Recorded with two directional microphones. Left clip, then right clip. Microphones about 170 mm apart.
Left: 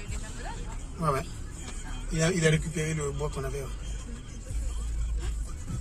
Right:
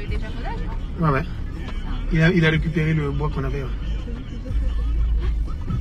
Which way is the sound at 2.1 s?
15° left (ahead or behind).